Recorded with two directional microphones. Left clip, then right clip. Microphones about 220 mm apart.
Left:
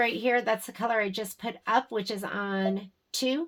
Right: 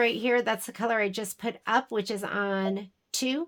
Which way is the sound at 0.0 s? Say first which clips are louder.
Right 1 dB; 30° right (ahead or behind).